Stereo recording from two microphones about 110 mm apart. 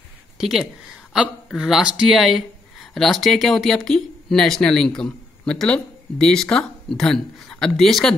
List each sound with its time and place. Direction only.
0.4 s speech: 5° right (ahead or behind)